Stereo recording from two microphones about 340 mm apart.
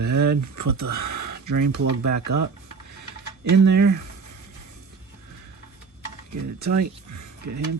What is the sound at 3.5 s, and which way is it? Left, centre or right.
Speech, right.